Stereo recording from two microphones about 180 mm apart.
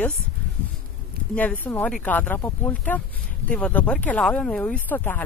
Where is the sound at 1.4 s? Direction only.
10° left (ahead or behind).